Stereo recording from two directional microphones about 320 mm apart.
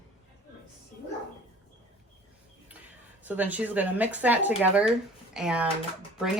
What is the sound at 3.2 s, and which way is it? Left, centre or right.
A woman's voice, centre.